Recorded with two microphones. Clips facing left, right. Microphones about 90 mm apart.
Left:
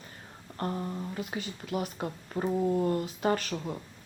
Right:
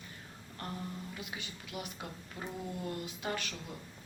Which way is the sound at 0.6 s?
40° left (ahead or behind).